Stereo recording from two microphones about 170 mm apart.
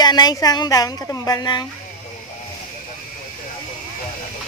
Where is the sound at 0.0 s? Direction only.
25° left (ahead or behind).